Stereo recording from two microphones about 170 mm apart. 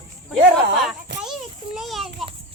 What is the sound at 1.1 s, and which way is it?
Children playing, 90° right.